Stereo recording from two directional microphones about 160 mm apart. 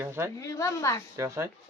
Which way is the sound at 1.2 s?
15° right (ahead or behind).